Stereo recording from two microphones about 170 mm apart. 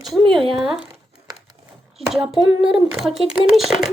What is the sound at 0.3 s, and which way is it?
Speech, 30° right (ahead or behind).